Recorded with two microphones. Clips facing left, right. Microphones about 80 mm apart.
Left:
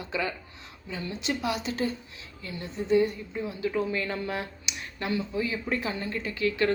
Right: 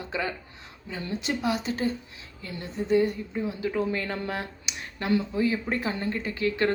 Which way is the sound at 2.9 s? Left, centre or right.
Right.